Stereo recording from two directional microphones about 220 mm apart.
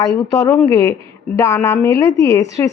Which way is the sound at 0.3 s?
15° left (ahead or behind).